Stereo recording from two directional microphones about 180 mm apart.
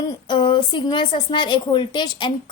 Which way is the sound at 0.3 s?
25° left (ahead or behind).